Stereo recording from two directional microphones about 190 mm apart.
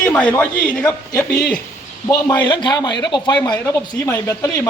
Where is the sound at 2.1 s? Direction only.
20° left (ahead or behind).